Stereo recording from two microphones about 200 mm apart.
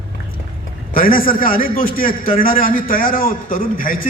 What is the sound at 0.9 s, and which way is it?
A man's voice, 45° left (ahead or behind).